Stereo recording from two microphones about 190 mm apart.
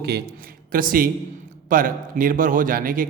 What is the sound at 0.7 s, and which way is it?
A man's voice, 45° right (ahead or behind).